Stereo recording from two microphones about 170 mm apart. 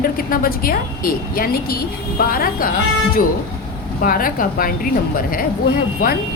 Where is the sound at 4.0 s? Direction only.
55° left (ahead or behind).